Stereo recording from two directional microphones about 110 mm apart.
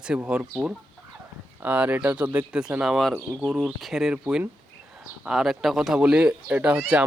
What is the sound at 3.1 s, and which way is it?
Speech, 20° right (ahead or behind).